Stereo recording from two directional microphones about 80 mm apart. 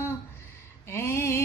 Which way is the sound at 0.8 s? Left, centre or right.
Left.